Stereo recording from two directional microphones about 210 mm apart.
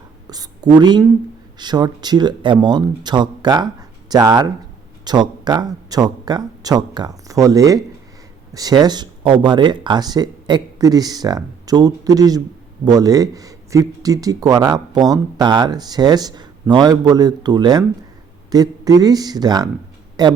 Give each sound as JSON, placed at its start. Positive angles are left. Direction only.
{"t": 0.3, "sound": "a woman's voice", "side_deg": -20}